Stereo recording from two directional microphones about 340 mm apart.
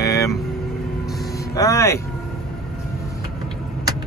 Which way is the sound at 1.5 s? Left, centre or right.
Centre.